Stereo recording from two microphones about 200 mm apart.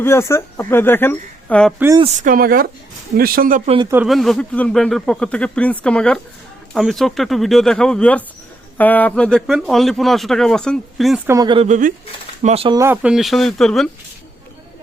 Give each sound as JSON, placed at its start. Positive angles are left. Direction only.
{"t": 0.0, "sound": "a woman's voice", "side_deg": 15}
{"t": 2.2, "sound": "speech", "side_deg": -45}
{"t": 3.8, "sound": "speech", "side_deg": -5}
{"t": 11.3, "sound": "speech", "side_deg": -20}
{"t": 11.7, "sound": "speech", "side_deg": -40}
{"t": 12.4, "sound": "speech", "side_deg": -30}
{"t": 12.7, "sound": "speech", "side_deg": -10}